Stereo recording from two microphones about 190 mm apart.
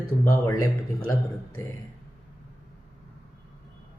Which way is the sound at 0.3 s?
15° left (ahead or behind).